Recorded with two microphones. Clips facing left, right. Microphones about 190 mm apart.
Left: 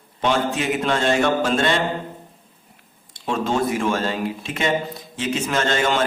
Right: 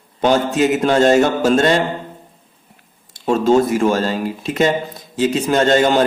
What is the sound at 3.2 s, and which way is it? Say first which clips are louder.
A man's voice: right 8 dB; 40° right (ahead or behind).